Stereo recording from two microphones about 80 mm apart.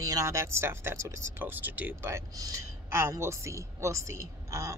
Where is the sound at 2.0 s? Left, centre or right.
Right.